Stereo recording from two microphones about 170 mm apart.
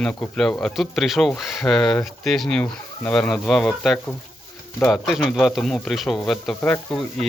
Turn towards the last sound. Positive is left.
turn(degrees=5)  # may be behind; listen again after turning